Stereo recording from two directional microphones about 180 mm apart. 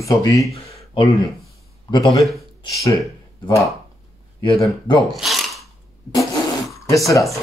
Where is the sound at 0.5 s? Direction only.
30° left (ahead or behind).